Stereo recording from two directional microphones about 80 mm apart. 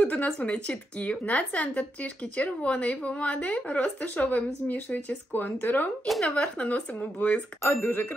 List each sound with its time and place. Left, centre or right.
0.0 s a woman's voice: centre
6.0 s speech: centre
6.3 s a woman's voice: centre